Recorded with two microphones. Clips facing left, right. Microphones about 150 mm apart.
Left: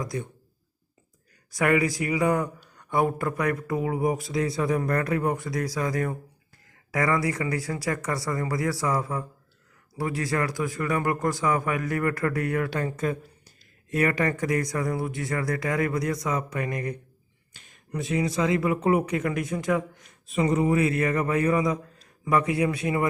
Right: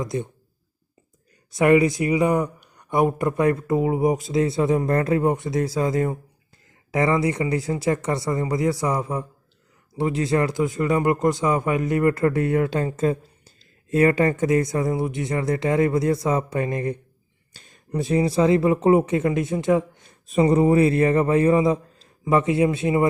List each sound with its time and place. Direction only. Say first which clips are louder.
0.0 s speech: right 5 dB; 25° right (ahead or behind)
1.5 s speech: right 6 dB; 25° right (ahead or behind)